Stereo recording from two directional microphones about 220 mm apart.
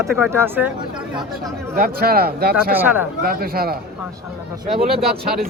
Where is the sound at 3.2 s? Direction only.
40° right (ahead or behind).